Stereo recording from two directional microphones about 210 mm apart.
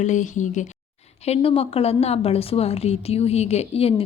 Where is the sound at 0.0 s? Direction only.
35° left (ahead or behind).